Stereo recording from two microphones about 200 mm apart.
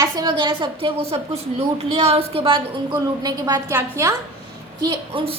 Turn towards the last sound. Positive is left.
turn(degrees=-25)  # may be behind; listen again after turning